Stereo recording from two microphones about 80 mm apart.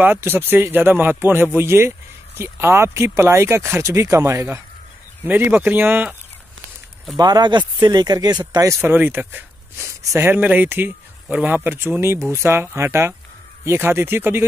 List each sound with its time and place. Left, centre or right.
0.0 s speech: right
7.2 s speech: right
8.8 s speech: right